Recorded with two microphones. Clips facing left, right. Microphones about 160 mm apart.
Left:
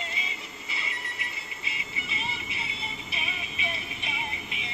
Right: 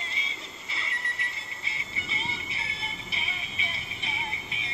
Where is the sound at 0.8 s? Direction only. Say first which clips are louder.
Even; 10° left (ahead or behind).